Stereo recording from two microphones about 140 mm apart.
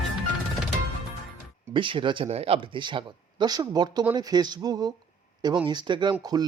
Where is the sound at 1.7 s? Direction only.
35° right (ahead or behind).